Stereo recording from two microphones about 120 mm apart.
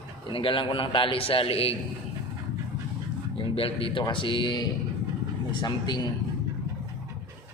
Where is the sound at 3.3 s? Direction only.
50° left (ahead or behind).